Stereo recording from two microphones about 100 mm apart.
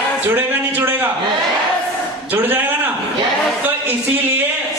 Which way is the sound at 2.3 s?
20° right (ahead or behind).